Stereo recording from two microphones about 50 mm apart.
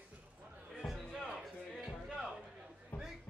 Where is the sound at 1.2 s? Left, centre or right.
Centre.